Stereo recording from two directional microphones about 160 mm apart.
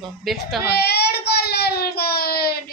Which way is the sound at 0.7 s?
90° left.